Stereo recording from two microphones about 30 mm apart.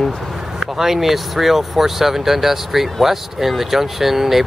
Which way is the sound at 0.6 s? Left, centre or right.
Centre.